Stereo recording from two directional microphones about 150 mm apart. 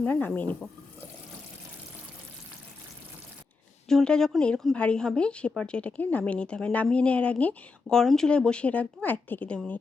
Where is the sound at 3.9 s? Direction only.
5° left (ahead or behind).